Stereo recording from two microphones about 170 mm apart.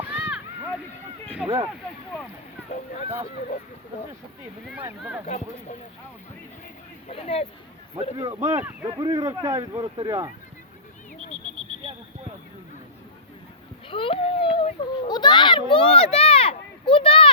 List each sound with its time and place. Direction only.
0.0 s a sound: 10° right (ahead or behind)
1.3 s speech: 10° right (ahead or behind)
5.2 s speech: 45° left (ahead or behind)
7.1 s speech: 35° left (ahead or behind)
8.4 s speech: 15° right (ahead or behind)
13.8 s a child's voice: 30° left (ahead or behind)